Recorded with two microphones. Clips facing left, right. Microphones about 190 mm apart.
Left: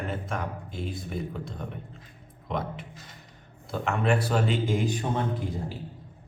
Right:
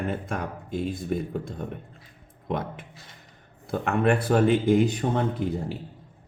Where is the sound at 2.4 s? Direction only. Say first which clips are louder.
Right 2 dB; 50° right (ahead or behind).